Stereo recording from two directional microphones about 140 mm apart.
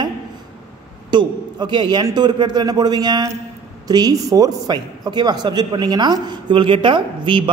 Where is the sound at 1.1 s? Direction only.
30° right (ahead or behind).